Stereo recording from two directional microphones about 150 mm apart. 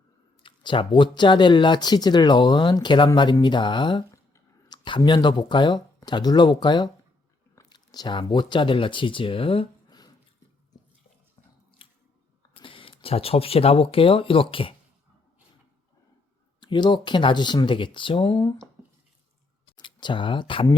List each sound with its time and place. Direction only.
0.4 s speech: 35° left (ahead or behind)
11.8 s biting: 35° left (ahead or behind)
12.5 s speech: 35° left (ahead or behind)
16.6 s speech: 30° left (ahead or behind)
19.7 s speech: 30° left (ahead or behind)